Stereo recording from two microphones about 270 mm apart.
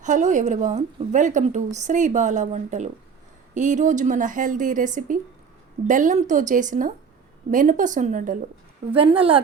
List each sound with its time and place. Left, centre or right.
0.0 s a woman's voice: right